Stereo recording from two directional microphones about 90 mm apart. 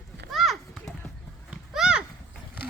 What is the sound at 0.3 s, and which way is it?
Children playing, centre (ahead or behind).